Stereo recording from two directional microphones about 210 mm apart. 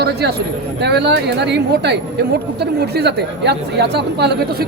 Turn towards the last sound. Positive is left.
turn(degrees=-50)  # may be behind; listen again after turning